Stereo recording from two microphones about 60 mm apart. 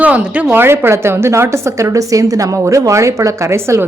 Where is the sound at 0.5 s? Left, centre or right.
Right.